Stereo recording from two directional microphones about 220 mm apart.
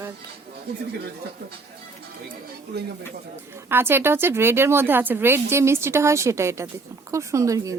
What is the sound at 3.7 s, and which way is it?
Speech, 10° right (ahead or behind).